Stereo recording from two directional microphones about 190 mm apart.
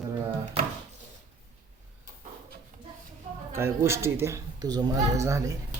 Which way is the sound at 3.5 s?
15° right (ahead or behind).